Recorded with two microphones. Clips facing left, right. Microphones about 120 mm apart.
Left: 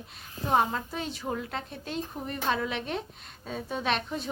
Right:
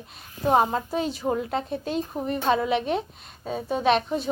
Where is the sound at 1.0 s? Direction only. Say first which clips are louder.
Right 7 dB; 15° right (ahead or behind).